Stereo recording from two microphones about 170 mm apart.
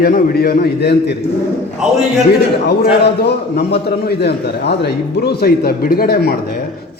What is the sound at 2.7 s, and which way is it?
A man's voice, 75° left (ahead or behind).